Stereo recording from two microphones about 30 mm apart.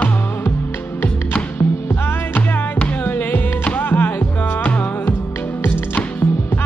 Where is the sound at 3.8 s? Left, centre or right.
Left.